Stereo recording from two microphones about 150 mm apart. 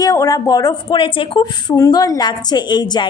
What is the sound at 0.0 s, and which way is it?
A woman's voice, 25° left (ahead or behind).